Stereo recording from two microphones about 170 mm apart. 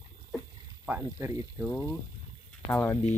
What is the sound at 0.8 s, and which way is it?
Speech, 15° right (ahead or behind).